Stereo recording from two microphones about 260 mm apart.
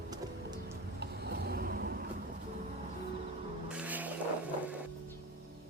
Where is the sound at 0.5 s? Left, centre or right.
Right.